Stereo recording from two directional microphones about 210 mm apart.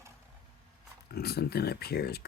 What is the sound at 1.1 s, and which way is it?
Speech, 50° left (ahead or behind).